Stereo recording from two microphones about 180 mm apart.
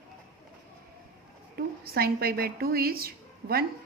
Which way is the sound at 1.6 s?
60° right (ahead or behind).